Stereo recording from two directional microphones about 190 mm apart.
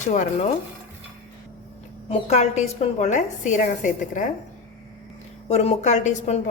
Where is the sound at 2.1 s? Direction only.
35° left (ahead or behind).